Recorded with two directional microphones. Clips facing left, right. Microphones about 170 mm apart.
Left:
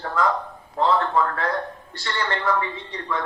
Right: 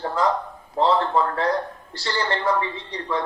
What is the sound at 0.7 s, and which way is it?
A woman's voice, 30° right (ahead or behind).